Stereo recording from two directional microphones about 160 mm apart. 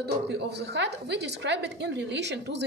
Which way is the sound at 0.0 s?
90° right.